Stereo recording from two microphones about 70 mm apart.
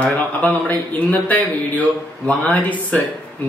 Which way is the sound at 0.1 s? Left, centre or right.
Left.